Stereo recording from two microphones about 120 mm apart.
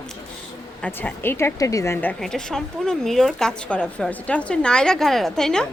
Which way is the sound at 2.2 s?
5° left (ahead or behind).